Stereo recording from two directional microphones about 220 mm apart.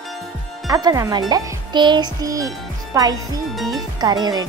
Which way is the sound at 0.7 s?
15° right (ahead or behind).